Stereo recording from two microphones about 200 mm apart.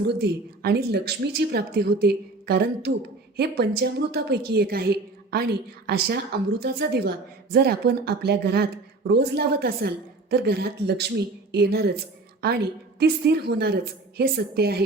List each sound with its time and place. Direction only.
0.1 s a woman's voice: 55° right (ahead or behind)
13.0 s a woman's voice: 55° right (ahead or behind)